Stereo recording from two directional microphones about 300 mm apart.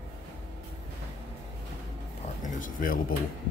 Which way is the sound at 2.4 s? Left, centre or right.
Left.